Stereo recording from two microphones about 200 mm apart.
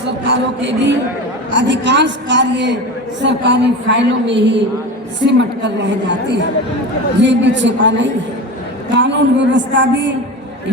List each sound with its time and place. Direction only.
0.3 s a woman's voice: 60° right (ahead or behind)